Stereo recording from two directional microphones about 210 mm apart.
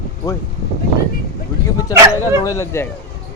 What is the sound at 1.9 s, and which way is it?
Speech, 15° right (ahead or behind).